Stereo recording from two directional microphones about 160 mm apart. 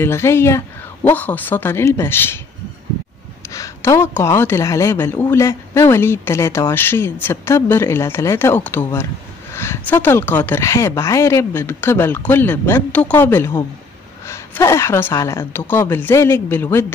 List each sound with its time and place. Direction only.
0.0 s a woman's voice: 15° left (ahead or behind)
3.4 s a woman's voice: 20° left (ahead or behind)